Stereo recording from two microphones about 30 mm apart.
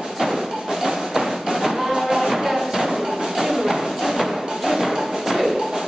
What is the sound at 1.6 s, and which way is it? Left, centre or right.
Music, centre.